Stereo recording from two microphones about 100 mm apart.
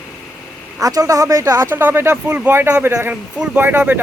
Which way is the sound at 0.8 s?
35° right (ahead or behind).